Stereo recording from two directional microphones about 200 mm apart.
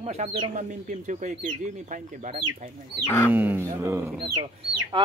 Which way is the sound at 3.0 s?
10° left (ahead or behind).